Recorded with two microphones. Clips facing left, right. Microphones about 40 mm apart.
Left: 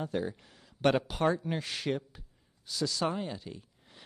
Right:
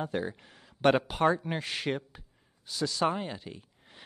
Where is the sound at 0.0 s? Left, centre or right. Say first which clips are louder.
Right 1 dB; right.